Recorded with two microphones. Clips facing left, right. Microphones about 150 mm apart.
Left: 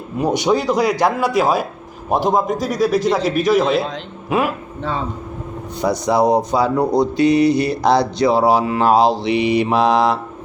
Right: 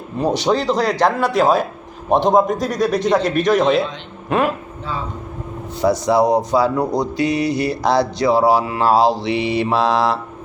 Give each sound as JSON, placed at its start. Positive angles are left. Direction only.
{"t": 0.2, "sound": "a man's voice", "side_deg": 15}
{"t": 5.9, "sound": "speech", "side_deg": 20}